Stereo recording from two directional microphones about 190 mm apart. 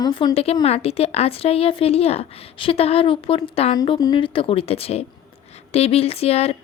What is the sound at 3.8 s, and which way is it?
A woman's voice, 20° left (ahead or behind).